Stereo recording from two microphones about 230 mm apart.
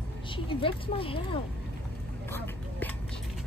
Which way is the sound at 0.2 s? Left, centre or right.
Left.